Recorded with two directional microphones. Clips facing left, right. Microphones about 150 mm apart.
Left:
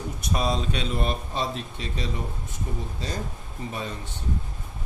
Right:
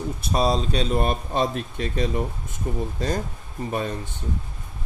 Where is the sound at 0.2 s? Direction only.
35° right (ahead or behind).